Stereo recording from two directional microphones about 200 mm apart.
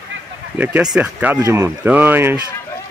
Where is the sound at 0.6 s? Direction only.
10° right (ahead or behind).